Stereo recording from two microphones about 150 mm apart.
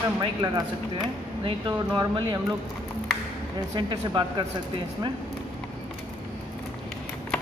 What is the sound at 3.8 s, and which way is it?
Speech, 30° right (ahead or behind).